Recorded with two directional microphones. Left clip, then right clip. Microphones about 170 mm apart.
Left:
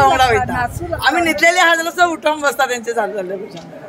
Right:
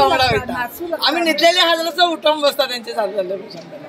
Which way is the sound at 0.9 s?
40° left (ahead or behind).